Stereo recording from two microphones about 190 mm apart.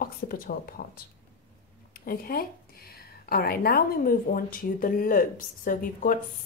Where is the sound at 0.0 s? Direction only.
50° left (ahead or behind).